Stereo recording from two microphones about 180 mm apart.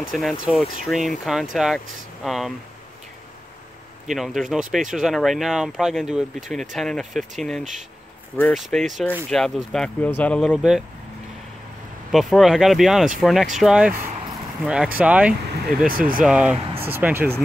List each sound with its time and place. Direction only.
0.0 s speech: centre (ahead or behind)
4.1 s speech: centre (ahead or behind)
10.5 s speech: 5° right (ahead or behind)
12.1 s speech: centre (ahead or behind)
15.9 s speech: 50° right (ahead or behind)
16.3 s speech: 5° right (ahead or behind)